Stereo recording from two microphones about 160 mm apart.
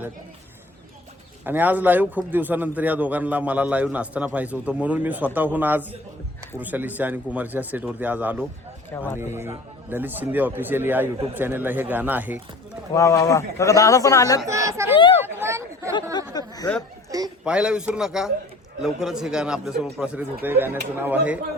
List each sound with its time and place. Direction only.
1.5 s a man's voice: 10° right (ahead or behind)
8.9 s speech: 15° left (ahead or behind)
9.1 s a man's voice: 15° right (ahead or behind)
12.9 s a man's voice: 20° left (ahead or behind)
14.4 s speech: 20° right (ahead or behind)
16.3 s a man's voice: 25° left (ahead or behind)
17.1 s speech: 25° right (ahead or behind)
17.4 s a man's voice: 5° right (ahead or behind)